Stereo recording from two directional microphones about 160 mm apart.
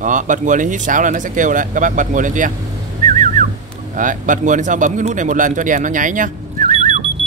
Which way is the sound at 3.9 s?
55° right (ahead or behind).